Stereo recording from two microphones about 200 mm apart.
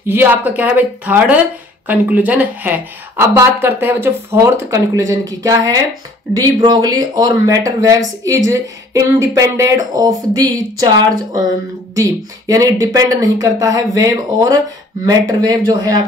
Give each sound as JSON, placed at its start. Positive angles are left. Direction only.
{"t": 0.0, "sound": "a woman's voice", "side_deg": -10}